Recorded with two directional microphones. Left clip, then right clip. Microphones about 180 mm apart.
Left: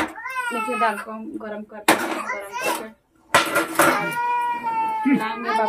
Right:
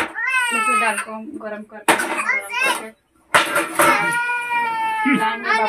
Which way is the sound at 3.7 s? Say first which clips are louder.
Right 3 dB; 25° left (ahead or behind).